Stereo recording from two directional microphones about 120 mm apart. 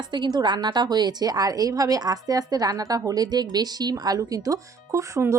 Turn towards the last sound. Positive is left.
turn(degrees=-25)  # may be behind; listen again after turning